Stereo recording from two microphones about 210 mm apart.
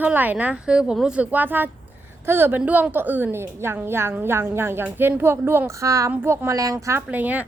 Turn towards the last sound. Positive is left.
turn(degrees=-5)  # may be behind; listen again after turning